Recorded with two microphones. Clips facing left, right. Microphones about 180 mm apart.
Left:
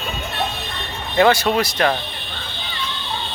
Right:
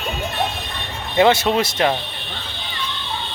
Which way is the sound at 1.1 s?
20° right (ahead or behind).